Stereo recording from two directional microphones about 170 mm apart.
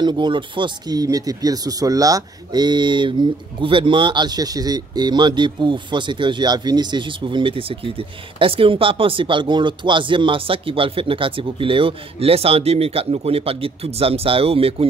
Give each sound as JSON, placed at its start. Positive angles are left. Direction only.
{"t": 0.0, "sound": "speech", "side_deg": -25}